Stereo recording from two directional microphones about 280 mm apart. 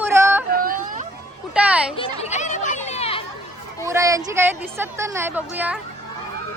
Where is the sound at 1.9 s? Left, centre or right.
Left.